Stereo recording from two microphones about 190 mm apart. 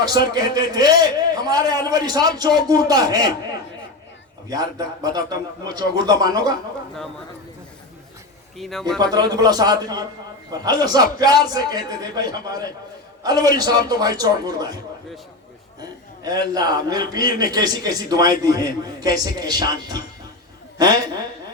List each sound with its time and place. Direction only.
0.0 s a man's voice: 20° right (ahead or behind)
4.4 s a man's voice: 20° right (ahead or behind)
8.5 s speech: centre (ahead or behind)
9.0 s a man's voice: 20° right (ahead or behind)
15.8 s a man's voice: 20° right (ahead or behind)